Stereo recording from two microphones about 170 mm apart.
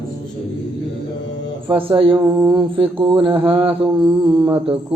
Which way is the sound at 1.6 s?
30° right (ahead or behind).